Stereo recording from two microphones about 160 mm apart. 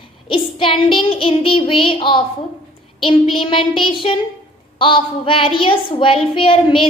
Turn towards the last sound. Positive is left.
turn(degrees=35)  # may be behind; listen again after turning